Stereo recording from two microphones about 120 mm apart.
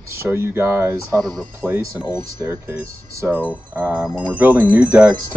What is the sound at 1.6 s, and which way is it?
Wind chime, 15° right (ahead or behind).